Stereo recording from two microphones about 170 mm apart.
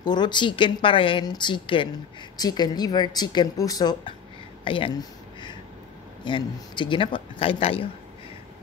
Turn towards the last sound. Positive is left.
turn(degrees=35)  # may be behind; listen again after turning